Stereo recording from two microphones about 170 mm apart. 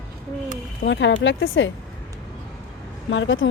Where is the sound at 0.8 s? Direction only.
90° left.